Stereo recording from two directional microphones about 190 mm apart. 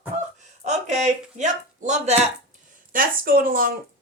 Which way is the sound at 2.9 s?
50° right (ahead or behind).